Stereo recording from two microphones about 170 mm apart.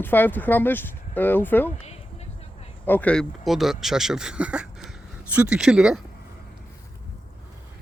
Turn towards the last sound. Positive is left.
turn(degrees=-5)  # may be behind; listen again after turning